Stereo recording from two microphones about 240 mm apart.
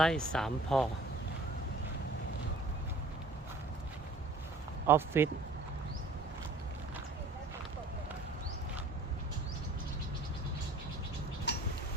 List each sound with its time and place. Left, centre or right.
0.0 s speech: centre
4.9 s speech: centre